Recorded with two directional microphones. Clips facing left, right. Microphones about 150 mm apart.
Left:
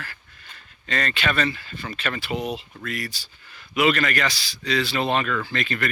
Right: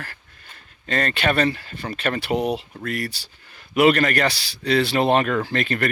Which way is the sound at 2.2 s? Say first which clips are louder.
Right 6 dB; 65° right (ahead or behind).